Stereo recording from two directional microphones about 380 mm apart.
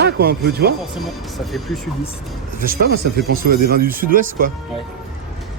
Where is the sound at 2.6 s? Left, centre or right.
Right.